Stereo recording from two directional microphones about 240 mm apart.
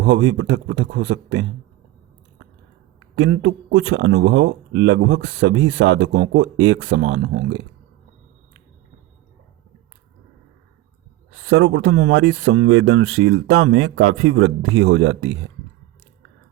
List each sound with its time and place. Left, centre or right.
0.0 s speech: right
3.2 s speech: right
11.3 s speech: right